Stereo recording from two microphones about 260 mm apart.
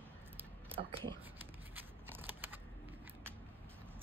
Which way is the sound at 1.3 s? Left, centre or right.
Centre.